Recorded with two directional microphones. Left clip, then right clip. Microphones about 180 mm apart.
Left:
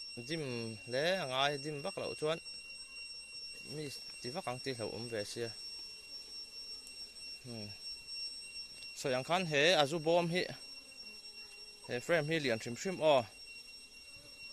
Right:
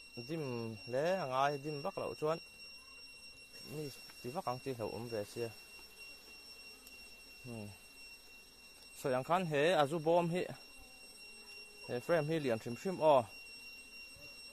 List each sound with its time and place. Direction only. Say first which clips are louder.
0.1 s speech: even; 5° left (ahead or behind)
3.7 s speech: even; 5° left (ahead or behind)
7.4 s speech: right 3 dB; centre (ahead or behind)
9.0 s speech: even; 5° left (ahead or behind)
11.9 s speech: left 1 dB; 5° left (ahead or behind)